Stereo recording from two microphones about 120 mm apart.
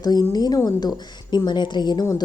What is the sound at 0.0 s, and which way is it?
A woman's voice, 35° left (ahead or behind).